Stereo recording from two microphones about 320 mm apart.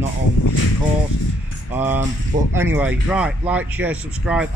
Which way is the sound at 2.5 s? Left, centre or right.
Centre.